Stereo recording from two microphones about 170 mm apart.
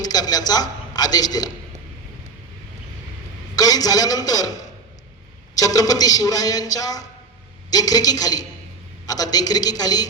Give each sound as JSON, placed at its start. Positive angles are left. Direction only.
{"t": 0.0, "sound": "a man's voice", "side_deg": 25}
{"t": 3.5, "sound": "a man's voice", "side_deg": 20}
{"t": 5.5, "sound": "a man's voice", "side_deg": 20}